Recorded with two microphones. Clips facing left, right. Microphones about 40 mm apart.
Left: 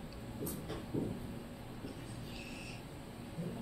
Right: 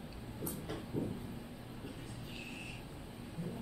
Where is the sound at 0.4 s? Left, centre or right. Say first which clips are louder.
Even; right.